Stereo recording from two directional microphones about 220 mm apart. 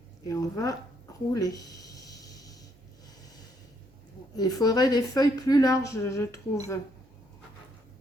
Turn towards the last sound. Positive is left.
turn(degrees=15)  # may be behind; listen again after turning